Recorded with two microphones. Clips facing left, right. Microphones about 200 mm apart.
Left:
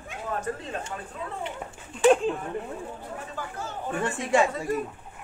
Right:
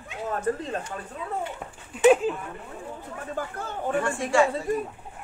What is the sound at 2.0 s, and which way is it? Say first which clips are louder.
Speech: right 2 dB; 5° right (ahead or behind).